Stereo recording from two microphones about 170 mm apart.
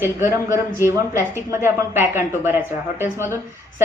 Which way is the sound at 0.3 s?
15° right (ahead or behind).